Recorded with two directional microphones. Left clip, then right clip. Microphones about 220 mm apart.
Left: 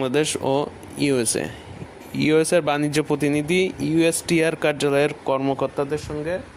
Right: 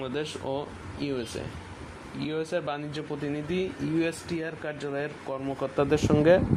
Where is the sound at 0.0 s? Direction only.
45° left (ahead or behind).